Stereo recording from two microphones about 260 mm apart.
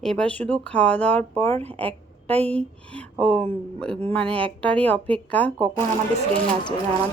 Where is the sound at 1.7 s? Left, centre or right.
Centre.